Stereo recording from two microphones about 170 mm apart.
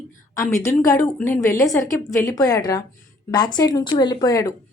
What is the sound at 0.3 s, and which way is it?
A woman's voice, 15° left (ahead or behind).